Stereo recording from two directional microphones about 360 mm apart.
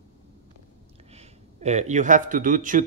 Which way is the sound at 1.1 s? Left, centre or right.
Centre.